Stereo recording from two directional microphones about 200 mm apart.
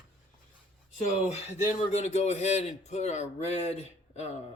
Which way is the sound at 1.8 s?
35° left (ahead or behind).